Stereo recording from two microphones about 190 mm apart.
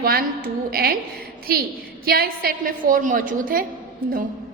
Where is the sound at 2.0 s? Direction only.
50° right (ahead or behind).